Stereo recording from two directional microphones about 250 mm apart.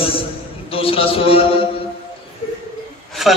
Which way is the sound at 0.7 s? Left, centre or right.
Left.